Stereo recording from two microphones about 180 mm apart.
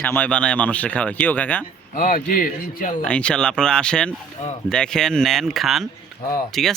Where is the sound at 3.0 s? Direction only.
5° left (ahead or behind).